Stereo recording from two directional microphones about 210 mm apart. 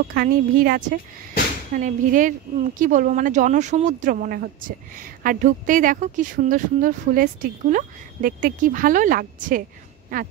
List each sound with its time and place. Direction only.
0.1 s speech: 45° right (ahead or behind)